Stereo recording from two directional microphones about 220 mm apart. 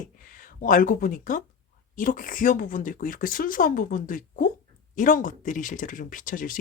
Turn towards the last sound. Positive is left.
turn(degrees=35)  # may be behind; listen again after turning